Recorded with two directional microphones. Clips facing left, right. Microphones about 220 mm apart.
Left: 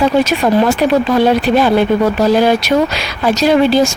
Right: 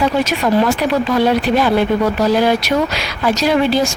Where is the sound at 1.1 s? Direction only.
30° left (ahead or behind).